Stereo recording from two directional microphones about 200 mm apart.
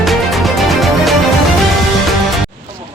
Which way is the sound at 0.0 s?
Centre (ahead or behind).